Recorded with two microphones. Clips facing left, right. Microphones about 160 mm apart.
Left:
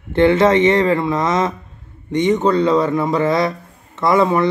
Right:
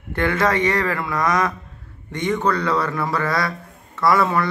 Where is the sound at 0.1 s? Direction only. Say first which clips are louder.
Left 8 dB; 25° left (ahead or behind).